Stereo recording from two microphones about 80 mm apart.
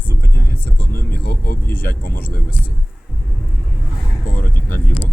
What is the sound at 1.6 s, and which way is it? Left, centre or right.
Speech, left.